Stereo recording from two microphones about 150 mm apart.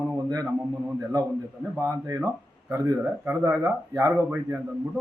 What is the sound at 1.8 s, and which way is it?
A man's voice, 20° right (ahead or behind).